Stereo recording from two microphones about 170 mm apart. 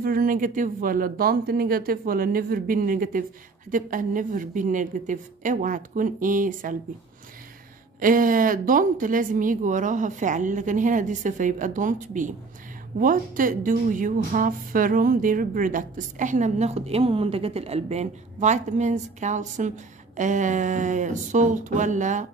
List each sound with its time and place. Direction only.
0.0 s speech: 60° right (ahead or behind)
8.0 s speech: 55° right (ahead or behind)